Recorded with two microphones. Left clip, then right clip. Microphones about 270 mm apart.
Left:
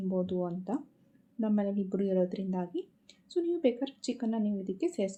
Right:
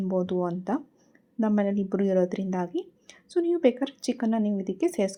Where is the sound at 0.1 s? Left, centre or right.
Right.